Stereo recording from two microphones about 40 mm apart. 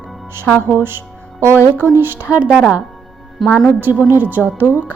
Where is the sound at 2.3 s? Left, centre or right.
Right.